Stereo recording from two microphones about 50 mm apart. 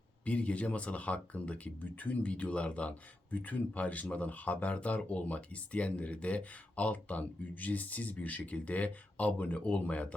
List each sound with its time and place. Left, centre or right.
0.3 s speech: left